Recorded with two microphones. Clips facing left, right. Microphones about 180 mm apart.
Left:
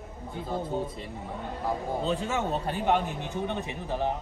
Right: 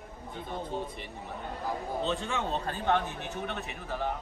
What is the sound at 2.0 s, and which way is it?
A man's voice, 10° left (ahead or behind).